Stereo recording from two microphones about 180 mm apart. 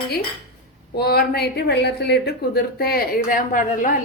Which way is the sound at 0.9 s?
60° left (ahead or behind).